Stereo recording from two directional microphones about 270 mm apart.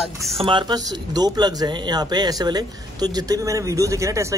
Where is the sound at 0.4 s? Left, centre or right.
Centre.